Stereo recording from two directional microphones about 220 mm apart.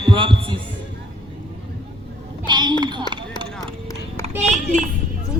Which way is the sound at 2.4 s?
20° right (ahead or behind).